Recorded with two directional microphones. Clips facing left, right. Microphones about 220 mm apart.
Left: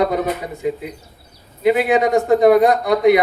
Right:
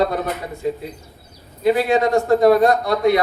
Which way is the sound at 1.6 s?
20° left (ahead or behind).